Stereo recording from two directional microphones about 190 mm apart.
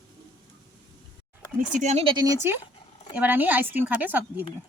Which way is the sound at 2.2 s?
15° right (ahead or behind).